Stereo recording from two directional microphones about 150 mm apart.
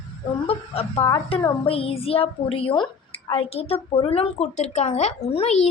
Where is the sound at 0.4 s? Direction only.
40° left (ahead or behind).